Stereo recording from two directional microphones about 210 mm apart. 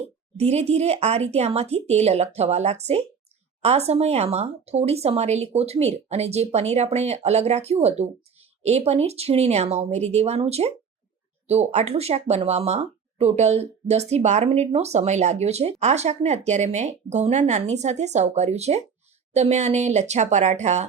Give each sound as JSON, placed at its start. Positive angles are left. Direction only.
{"t": 0.0, "sound": "speech", "side_deg": -30}